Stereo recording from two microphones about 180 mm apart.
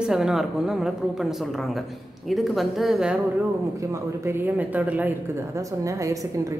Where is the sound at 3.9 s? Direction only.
15° right (ahead or behind).